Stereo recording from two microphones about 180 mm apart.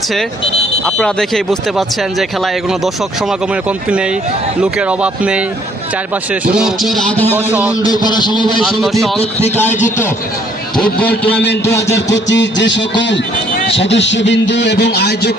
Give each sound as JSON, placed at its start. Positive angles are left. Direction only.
{"t": 0.9, "sound": "speech", "side_deg": 5}
{"t": 3.5, "sound": "speech", "side_deg": -5}
{"t": 6.5, "sound": "speech", "side_deg": -5}
{"t": 7.3, "sound": "speech", "side_deg": -5}
{"t": 7.9, "sound": "a man's voice", "side_deg": 20}
{"t": 8.6, "sound": "speech", "side_deg": 0}
{"t": 11.6, "sound": "a sound", "side_deg": 15}
{"t": 12.1, "sound": "a man's voice", "side_deg": 80}